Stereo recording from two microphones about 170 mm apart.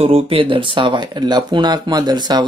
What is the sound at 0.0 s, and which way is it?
Speech, 35° right (ahead or behind).